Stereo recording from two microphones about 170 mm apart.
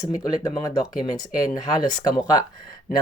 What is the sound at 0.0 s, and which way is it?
Speech, 20° left (ahead or behind).